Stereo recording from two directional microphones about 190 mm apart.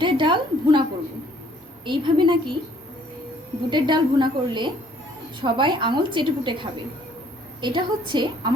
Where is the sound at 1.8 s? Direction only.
25° right (ahead or behind).